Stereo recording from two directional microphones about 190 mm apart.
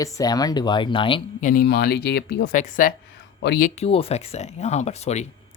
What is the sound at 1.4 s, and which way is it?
Speech, 50° left (ahead or behind).